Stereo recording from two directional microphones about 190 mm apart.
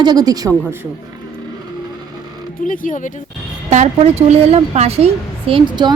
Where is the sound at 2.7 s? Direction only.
45° left (ahead or behind).